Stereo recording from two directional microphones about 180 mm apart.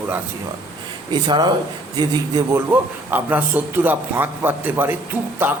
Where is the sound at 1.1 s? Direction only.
25° right (ahead or behind).